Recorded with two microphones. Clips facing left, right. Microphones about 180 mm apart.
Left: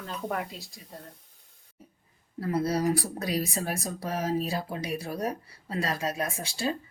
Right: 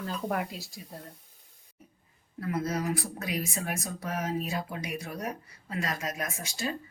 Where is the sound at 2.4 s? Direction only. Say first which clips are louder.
Left 4 dB; 35° left (ahead or behind).